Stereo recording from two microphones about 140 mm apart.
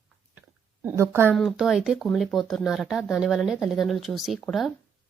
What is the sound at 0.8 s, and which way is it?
Speech, 20° right (ahead or behind).